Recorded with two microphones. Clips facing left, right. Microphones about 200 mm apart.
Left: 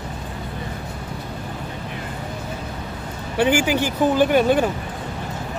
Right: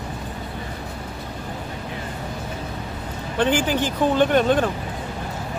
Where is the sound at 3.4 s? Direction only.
10° left (ahead or behind).